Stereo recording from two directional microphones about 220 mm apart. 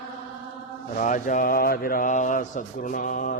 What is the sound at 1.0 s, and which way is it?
Mantra, 35° left (ahead or behind).